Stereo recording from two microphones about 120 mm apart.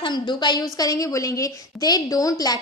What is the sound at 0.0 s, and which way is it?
A woman's voice, 40° left (ahead or behind).